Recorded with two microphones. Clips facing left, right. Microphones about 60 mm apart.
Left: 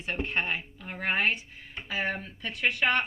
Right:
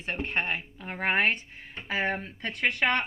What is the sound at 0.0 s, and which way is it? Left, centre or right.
Speech, right.